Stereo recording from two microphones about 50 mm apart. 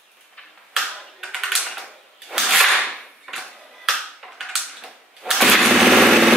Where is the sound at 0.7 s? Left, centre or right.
Centre.